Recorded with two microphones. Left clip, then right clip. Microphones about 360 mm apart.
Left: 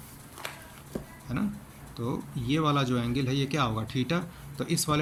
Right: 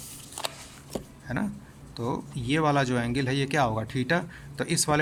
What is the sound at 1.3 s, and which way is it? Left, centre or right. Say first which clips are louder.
Speech: right 2 dB; right.